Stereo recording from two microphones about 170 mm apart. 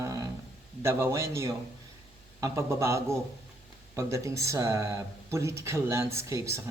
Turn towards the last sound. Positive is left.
turn(degrees=-20)  # may be behind; listen again after turning